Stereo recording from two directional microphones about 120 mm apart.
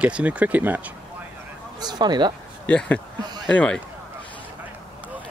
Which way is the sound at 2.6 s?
10° left (ahead or behind).